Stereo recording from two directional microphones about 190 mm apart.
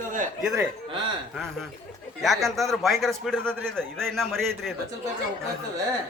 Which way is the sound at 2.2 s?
Centre (ahead or behind).